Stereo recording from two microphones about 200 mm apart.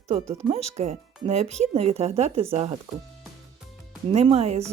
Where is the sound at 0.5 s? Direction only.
35° right (ahead or behind).